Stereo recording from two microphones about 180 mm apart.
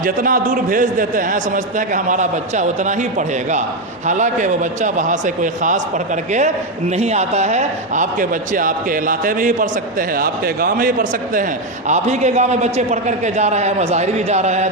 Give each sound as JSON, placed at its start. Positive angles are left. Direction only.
{"t": 0.0, "sound": "a man's voice", "side_deg": -50}
{"t": 6.9, "sound": "a man's voice", "side_deg": -35}
{"t": 11.9, "sound": "a man's voice", "side_deg": -40}